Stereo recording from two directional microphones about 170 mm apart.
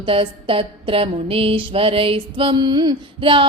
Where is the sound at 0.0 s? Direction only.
30° right (ahead or behind).